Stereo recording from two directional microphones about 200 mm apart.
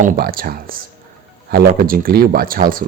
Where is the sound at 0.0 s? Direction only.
45° right (ahead or behind).